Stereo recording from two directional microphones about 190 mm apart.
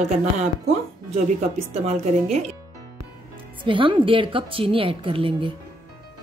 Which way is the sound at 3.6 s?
25° right (ahead or behind).